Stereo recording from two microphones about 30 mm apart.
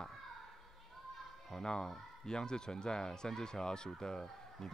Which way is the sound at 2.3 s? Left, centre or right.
Left.